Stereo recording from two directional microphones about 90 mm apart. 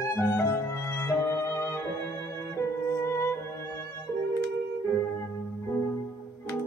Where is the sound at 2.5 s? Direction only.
30° left (ahead or behind).